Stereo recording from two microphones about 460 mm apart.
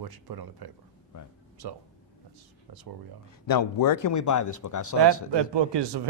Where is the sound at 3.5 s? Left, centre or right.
Left.